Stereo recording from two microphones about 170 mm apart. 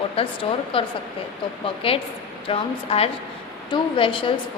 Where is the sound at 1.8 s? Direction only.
30° left (ahead or behind).